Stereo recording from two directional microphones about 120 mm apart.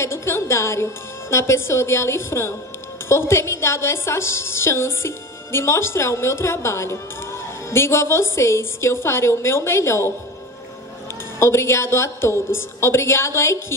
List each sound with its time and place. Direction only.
0.0 s a woman's voice: 20° left (ahead or behind)
11.3 s a woman's voice: 20° left (ahead or behind)